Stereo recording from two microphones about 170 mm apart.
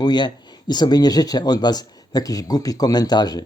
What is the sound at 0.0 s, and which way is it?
Speech, 25° left (ahead or behind).